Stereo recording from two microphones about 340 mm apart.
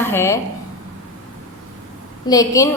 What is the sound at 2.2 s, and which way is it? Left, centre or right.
Speech, centre.